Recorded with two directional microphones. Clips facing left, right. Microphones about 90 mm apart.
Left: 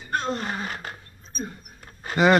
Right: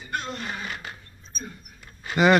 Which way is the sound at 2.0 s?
30° left (ahead or behind).